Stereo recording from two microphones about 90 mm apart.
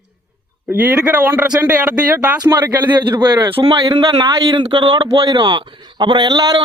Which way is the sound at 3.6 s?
55° right (ahead or behind).